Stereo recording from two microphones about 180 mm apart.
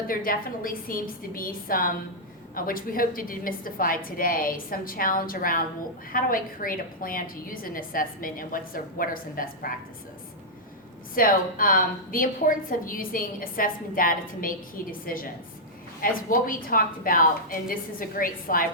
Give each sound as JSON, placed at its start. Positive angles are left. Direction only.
{"t": 0.1, "sound": "a woman's voice", "side_deg": 50}
{"t": 11.1, "sound": "a woman's voice", "side_deg": 50}